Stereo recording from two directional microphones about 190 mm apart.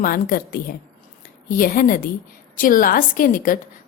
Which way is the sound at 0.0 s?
50° left (ahead or behind).